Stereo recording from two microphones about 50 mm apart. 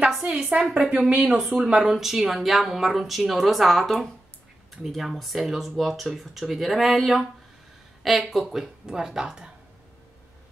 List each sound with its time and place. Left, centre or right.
0.3 s a woman's voice: centre
8.8 s speech: centre